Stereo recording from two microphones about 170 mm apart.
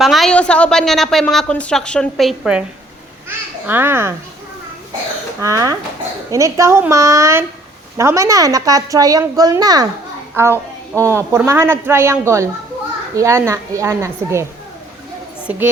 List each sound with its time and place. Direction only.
0.0 s a woman's voice: centre (ahead or behind)
5.4 s a woman's voice: 20° right (ahead or behind)
15.4 s a woman's voice: 10° right (ahead or behind)